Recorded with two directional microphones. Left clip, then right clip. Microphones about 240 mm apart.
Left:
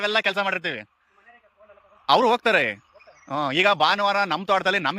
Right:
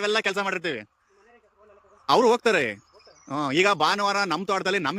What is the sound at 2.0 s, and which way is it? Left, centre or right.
Speech, centre.